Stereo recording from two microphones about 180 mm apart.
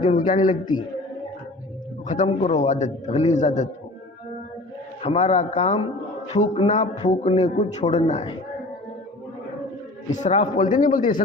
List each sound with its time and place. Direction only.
0.2 s a man's voice: 40° left (ahead or behind)
2.0 s a man's voice: 40° left (ahead or behind)
5.0 s a man's voice: 35° left (ahead or behind)
10.1 s a man's voice: 35° left (ahead or behind)
10.8 s a man's voice: 50° left (ahead or behind)